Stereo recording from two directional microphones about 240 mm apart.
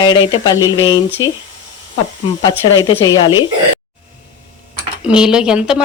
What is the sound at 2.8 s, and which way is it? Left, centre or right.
Speech, centre.